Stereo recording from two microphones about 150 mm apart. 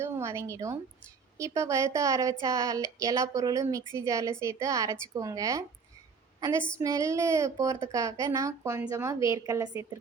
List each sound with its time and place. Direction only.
0.0 s a woman's voice: 20° right (ahead or behind)
6.7 s a woman's voice: 20° right (ahead or behind)